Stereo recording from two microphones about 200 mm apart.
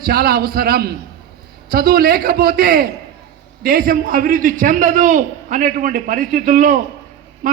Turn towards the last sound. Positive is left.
turn(degrees=-40)  # may be behind; listen again after turning